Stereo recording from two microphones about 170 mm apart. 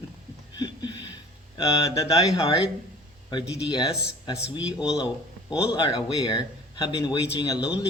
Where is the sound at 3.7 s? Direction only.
25° left (ahead or behind).